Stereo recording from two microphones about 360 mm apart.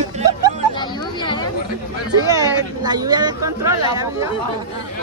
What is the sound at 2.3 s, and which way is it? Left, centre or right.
Speech, centre.